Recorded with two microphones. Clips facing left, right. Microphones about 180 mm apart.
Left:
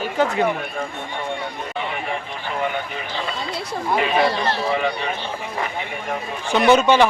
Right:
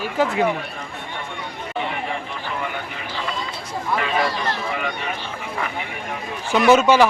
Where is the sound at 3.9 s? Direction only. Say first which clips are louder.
Left 3 dB; 20° left (ahead or behind).